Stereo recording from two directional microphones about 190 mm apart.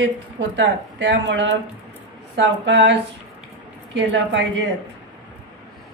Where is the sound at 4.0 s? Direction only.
75° right (ahead or behind).